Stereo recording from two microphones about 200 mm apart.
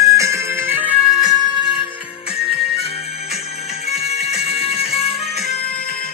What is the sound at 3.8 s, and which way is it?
Music, 30° left (ahead or behind).